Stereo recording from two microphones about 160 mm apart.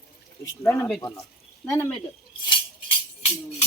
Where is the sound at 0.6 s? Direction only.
15° left (ahead or behind).